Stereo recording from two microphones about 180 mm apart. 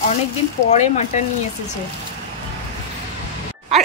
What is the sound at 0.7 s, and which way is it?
Speech, 40° left (ahead or behind).